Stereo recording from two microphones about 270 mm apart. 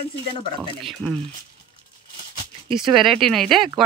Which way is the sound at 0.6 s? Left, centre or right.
Centre.